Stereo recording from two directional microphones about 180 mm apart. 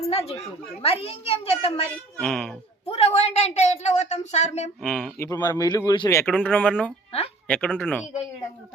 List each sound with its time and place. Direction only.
0.1 s a child's voice: 35° left (ahead or behind)
2.1 s speech: 5° left (ahead or behind)
2.8 s speech: 35° left (ahead or behind)
4.8 s a man's voice: 5° left (ahead or behind)